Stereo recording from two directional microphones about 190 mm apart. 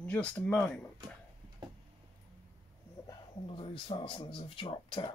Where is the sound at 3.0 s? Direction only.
25° left (ahead or behind).